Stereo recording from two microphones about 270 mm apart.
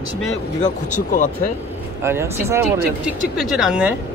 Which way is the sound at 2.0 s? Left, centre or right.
Centre.